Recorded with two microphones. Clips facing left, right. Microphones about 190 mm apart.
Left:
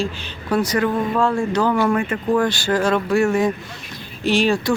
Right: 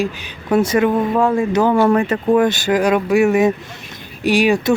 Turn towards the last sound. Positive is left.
turn(degrees=-15)  # may be behind; listen again after turning